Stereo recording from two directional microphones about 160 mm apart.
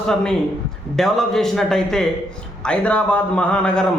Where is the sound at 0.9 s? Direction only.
Centre (ahead or behind).